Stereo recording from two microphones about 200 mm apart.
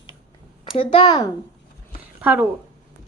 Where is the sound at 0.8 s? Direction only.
25° left (ahead or behind).